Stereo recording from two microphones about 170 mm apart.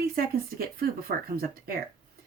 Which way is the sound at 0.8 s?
60° right (ahead or behind).